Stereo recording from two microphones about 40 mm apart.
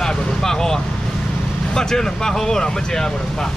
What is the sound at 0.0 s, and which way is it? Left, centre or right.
Vehicle, centre.